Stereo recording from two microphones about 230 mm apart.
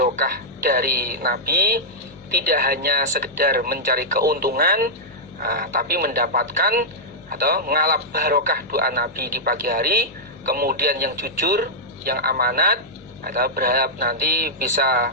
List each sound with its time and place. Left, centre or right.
0.0 s speech: right